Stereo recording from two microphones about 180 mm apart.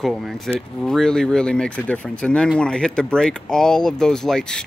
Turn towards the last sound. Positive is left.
turn(degrees=5)  # may be behind; listen again after turning